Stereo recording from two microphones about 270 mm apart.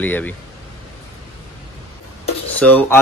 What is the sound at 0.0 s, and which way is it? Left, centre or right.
Speech, centre.